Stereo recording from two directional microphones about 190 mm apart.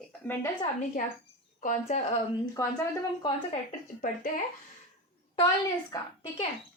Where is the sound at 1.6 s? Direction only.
40° left (ahead or behind).